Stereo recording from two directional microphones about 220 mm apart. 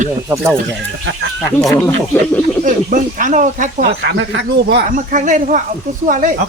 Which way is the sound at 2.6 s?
35° right (ahead or behind).